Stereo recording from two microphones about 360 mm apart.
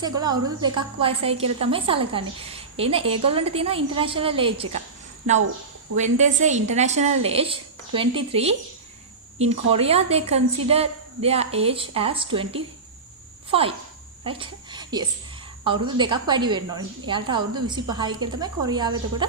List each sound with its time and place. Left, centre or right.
0.0 s a woman's voice: centre
6.0 s a woman's voice: centre